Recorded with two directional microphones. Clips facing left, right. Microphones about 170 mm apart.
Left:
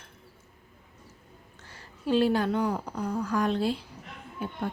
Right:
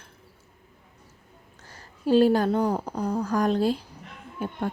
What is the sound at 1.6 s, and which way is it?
Speech, 40° right (ahead or behind).